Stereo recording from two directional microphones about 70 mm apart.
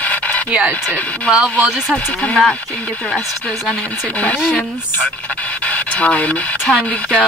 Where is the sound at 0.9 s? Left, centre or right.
Centre.